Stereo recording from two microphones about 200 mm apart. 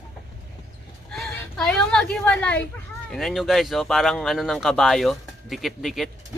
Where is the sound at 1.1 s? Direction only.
Centre (ahead or behind).